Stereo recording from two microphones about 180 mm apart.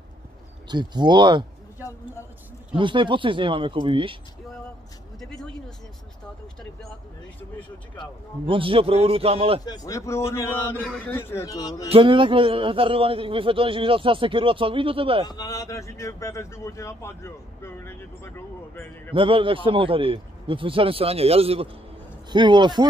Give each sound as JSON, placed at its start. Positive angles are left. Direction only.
{"t": 0.7, "sound": "a man's voice", "side_deg": -25}
{"t": 2.7, "sound": "a man's voice", "side_deg": -25}
{"t": 5.2, "sound": "a sound", "side_deg": 0}
{"t": 8.5, "sound": "a man's voice", "side_deg": -30}
{"t": 9.7, "sound": "speech", "side_deg": 15}
{"t": 11.9, "sound": "a man's voice", "side_deg": -30}
{"t": 15.2, "sound": "speech", "side_deg": 20}
{"t": 19.1, "sound": "a man's voice", "side_deg": -30}